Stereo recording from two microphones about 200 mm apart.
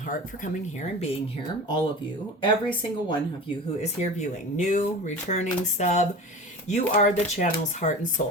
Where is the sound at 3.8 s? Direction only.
35° left (ahead or behind).